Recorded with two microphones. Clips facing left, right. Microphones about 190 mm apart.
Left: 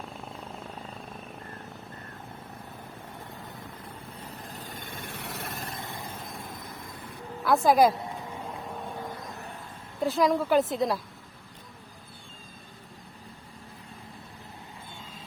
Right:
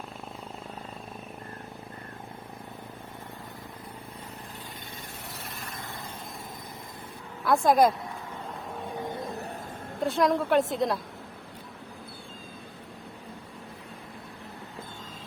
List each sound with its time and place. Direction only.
4.9 s vehicle: 70° left (ahead or behind)
7.4 s a woman's voice: centre (ahead or behind)
9.0 s a sound: 25° right (ahead or behind)
10.0 s a woman's voice: centre (ahead or behind)